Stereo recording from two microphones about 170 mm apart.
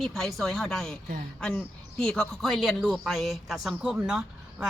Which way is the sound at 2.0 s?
5° left (ahead or behind).